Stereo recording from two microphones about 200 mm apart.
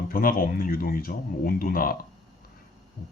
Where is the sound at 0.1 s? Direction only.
45° left (ahead or behind).